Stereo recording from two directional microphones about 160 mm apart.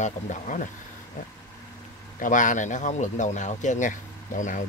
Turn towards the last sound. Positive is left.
turn(degrees=55)  # may be behind; listen again after turning